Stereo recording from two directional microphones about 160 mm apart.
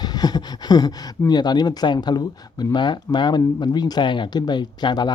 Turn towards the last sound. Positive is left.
turn(degrees=25)  # may be behind; listen again after turning